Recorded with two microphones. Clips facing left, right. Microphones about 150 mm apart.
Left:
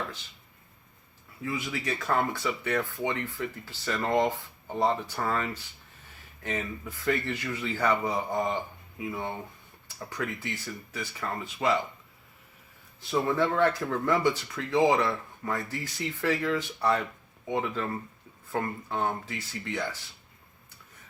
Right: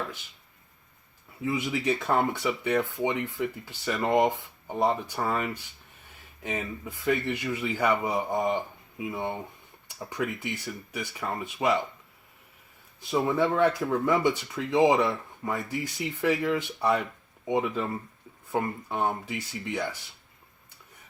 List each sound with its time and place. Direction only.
1.4 s speech: 20° right (ahead or behind)
13.1 s speech: 15° right (ahead or behind)